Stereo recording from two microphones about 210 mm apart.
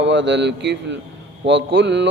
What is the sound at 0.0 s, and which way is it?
Mantra, 60° right (ahead or behind).